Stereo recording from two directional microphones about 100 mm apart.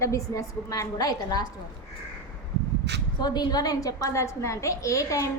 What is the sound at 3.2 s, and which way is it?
A woman's voice, 45° left (ahead or behind).